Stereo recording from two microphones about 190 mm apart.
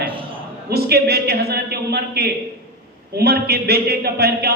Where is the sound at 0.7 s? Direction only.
55° right (ahead or behind).